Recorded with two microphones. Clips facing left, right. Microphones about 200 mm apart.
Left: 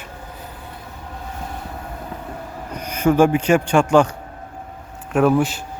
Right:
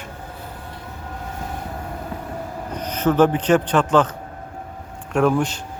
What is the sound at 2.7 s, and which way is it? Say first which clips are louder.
Speech: left 2 dB; 10° left (ahead or behind).